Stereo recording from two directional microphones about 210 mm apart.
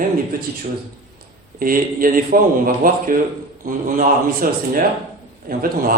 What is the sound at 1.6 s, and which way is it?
A man's voice, 40° right (ahead or behind).